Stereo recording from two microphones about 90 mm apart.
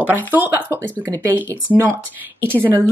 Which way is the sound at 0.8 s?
15° left (ahead or behind).